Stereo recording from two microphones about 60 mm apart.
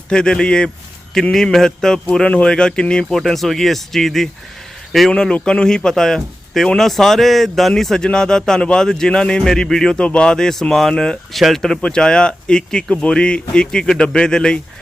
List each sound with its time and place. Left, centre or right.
0.1 s speech: centre
3.2 s speech: centre